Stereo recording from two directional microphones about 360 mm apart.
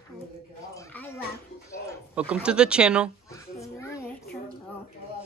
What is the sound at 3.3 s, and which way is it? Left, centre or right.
Babbling, centre.